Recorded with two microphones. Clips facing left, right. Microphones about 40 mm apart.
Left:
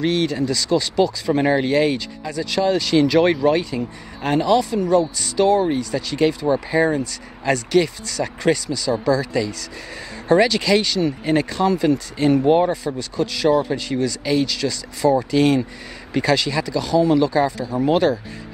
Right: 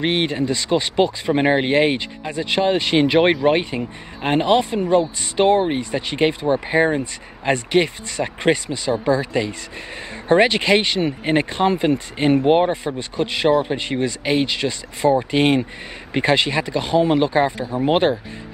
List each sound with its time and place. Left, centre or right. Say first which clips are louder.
0.0 s speech: even; right